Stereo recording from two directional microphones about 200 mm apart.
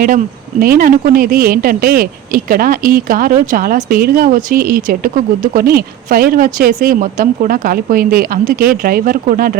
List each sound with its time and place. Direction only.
0.6 s speech: 45° right (ahead or behind)